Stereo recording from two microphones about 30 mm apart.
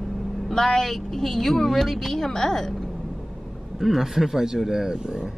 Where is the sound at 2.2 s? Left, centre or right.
Left.